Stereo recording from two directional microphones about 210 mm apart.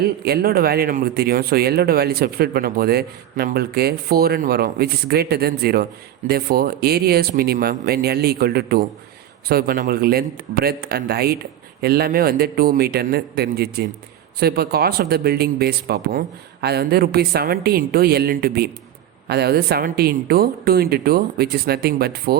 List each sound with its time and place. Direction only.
0.0 s speech: 45° right (ahead or behind)